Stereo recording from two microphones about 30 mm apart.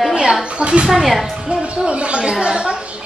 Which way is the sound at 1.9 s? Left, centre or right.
Right.